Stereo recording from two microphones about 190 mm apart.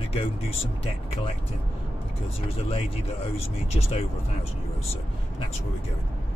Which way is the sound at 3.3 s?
30° left (ahead or behind).